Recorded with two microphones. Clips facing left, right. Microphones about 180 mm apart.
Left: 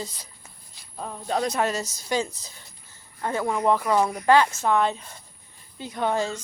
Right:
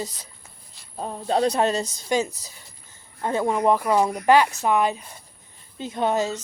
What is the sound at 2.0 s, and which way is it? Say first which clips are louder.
Speech: right 2 dB; 20° right (ahead or behind).